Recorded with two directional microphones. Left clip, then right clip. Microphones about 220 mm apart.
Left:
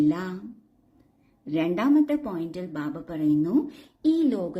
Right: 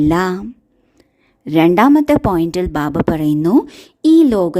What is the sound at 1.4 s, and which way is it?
A woman's voice, 50° right (ahead or behind).